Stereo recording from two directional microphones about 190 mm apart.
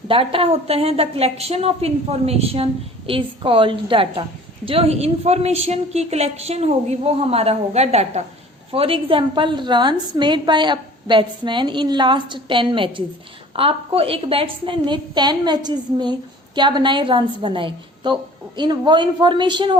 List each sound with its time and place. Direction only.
0.1 s a woman's voice: 30° right (ahead or behind)